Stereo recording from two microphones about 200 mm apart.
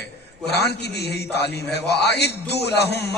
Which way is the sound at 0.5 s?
55° left (ahead or behind).